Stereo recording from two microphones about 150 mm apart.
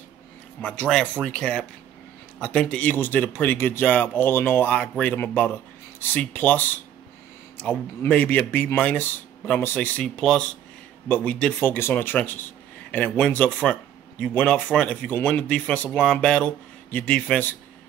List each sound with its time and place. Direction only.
0.6 s speech: 10° left (ahead or behind)